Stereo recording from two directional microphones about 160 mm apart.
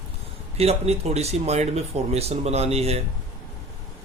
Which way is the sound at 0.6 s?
40° right (ahead or behind).